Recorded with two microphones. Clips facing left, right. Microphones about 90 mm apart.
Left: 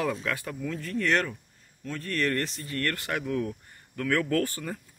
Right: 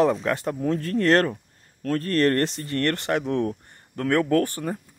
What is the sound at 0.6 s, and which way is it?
Speech, 45° right (ahead or behind).